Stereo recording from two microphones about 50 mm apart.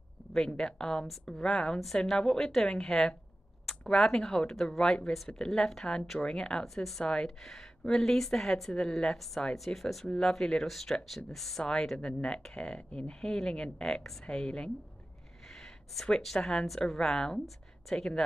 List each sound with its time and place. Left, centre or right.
0.3 s speech: centre
5.1 s speech: centre
6.6 s speech: centre
10.0 s speech: centre
12.1 s speech: centre
15.4 s a sound: centre
16.3 s speech: centre